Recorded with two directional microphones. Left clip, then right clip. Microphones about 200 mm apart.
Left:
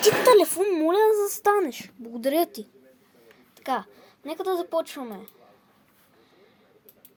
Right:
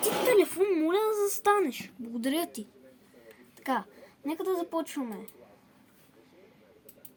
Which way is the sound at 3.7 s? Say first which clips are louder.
Left 3 dB; 45° left (ahead or behind).